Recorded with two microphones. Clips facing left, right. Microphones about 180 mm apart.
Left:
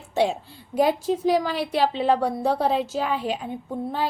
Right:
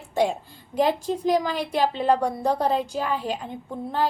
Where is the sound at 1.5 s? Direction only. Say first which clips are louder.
Left 1 dB; 45° right (ahead or behind).